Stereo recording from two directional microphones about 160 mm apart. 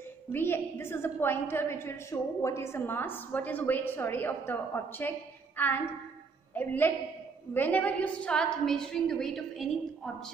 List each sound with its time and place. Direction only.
0.3 s a woman's voice: 15° left (ahead or behind)